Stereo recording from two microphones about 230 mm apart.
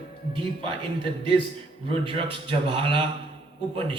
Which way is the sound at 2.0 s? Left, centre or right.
Right.